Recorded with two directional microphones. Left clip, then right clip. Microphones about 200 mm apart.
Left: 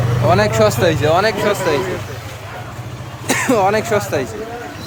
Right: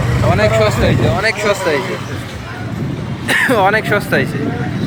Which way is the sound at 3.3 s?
Centre (ahead or behind).